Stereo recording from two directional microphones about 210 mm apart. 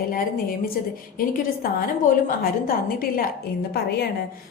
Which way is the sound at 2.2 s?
45° left (ahead or behind).